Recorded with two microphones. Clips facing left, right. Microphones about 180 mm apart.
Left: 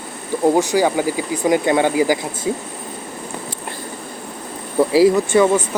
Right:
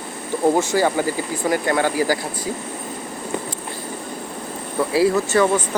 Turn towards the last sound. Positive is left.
turn(degrees=15)  # may be behind; listen again after turning